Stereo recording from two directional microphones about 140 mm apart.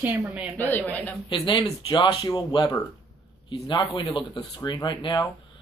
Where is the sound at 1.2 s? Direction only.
35° left (ahead or behind).